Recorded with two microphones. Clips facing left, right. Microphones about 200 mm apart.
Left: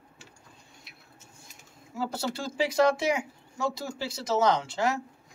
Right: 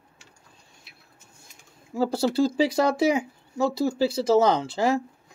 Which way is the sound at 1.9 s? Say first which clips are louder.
Right 8 dB; 35° right (ahead or behind).